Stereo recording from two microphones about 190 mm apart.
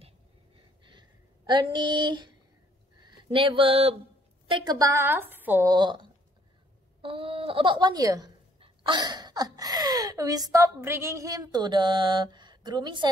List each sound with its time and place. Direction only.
0.8 s a sound: 25° right (ahead or behind)
3.0 s a woman's voice: 30° right (ahead or behind); by 5.7 s 10° right (ahead or behind)
5.7 s a woman's voice: 25° right (ahead or behind)